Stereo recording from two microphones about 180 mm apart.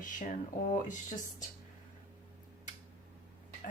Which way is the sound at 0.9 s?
45° left (ahead or behind).